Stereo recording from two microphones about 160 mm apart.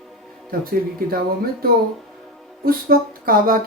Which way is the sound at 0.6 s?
65° right (ahead or behind).